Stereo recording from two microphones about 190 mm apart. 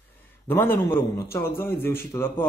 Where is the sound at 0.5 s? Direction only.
10° left (ahead or behind).